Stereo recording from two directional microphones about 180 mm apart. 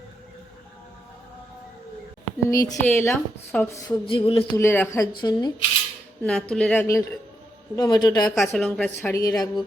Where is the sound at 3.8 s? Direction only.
30° left (ahead or behind).